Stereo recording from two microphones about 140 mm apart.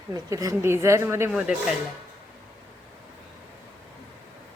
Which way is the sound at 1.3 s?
5° right (ahead or behind).